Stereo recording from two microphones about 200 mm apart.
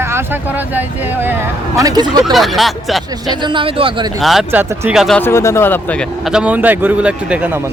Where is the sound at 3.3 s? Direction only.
25° right (ahead or behind).